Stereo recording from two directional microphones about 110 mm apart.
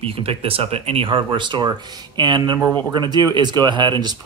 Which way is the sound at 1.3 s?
45° right (ahead or behind).